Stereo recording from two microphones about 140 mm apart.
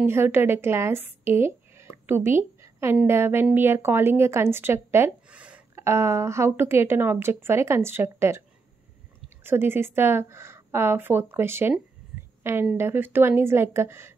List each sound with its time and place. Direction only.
0.0 s a woman's voice: 15° right (ahead or behind)
12.7 s a woman's voice: 15° right (ahead or behind)